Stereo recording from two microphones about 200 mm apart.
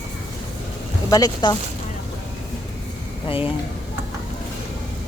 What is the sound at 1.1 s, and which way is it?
Speech, 20° left (ahead or behind).